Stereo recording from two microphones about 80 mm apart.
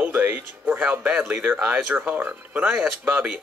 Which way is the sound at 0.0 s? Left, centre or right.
Right.